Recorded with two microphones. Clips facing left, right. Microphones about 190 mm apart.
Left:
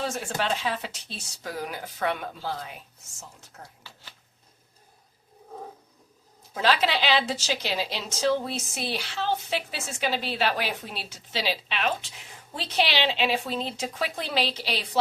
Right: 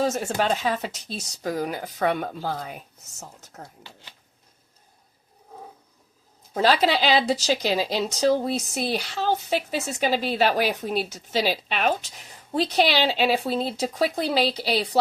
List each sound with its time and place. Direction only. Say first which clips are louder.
0.0 s speech: right 6 dB; 40° right (ahead or behind)
6.5 s a woman's voice: right 4 dB; 40° right (ahead or behind)